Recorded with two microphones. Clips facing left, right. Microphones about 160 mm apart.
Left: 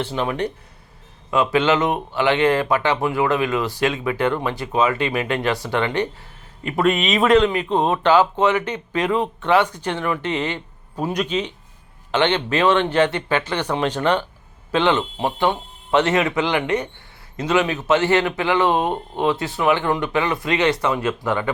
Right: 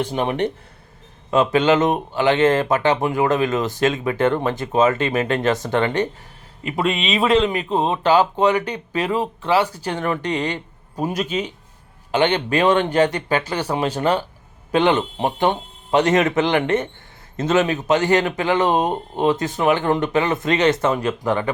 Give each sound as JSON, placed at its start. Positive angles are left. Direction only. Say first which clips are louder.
{"t": 0.3, "sound": "speech", "louder": "right 2 dB", "side_deg": -25}
{"t": 1.4, "sound": "speech", "louder": "right 2 dB", "side_deg": -45}
{"t": 6.7, "sound": "speech", "louder": "left 2 dB", "side_deg": -25}
{"t": 10.9, "sound": "speech", "louder": "even", "side_deg": -10}
{"t": 12.7, "sound": "speech", "louder": "right 1 dB", "side_deg": -40}
{"t": 13.7, "sound": "speech", "louder": "even", "side_deg": -10}
{"t": 14.7, "sound": "speech", "louder": "right 2 dB", "side_deg": -45}
{"t": 18.8, "sound": "speech", "louder": "right 1 dB", "side_deg": -15}
{"t": 19.2, "sound": "speech", "louder": "right 2 dB", "side_deg": -40}